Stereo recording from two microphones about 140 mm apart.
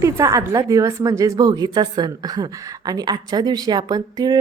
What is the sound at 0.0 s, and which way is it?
A woman's voice, 20° right (ahead or behind).